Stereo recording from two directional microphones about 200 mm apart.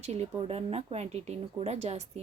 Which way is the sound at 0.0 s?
30° right (ahead or behind).